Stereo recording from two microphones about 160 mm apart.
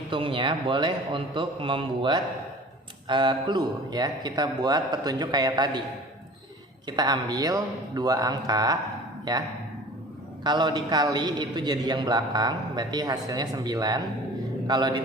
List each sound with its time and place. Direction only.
0.1 s a man's voice: 30° right (ahead or behind)
6.8 s a man's voice: 25° right (ahead or behind)